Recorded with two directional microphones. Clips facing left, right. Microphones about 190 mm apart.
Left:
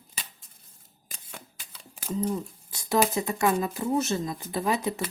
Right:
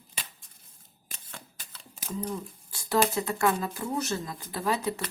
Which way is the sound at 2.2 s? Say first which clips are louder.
Left 5 dB; 20° left (ahead or behind).